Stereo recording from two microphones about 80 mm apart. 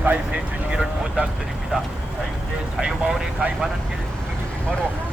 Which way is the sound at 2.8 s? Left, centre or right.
Centre.